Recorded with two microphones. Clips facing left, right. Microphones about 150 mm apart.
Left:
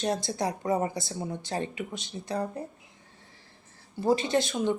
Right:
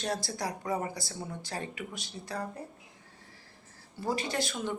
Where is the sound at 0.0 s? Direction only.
20° left (ahead or behind).